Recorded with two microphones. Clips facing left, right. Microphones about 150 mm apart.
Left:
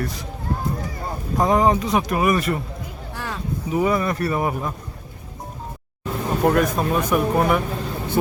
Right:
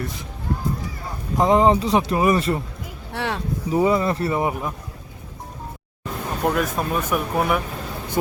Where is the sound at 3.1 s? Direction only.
70° right (ahead or behind).